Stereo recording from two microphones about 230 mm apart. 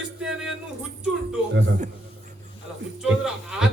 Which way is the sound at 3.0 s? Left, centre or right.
Centre.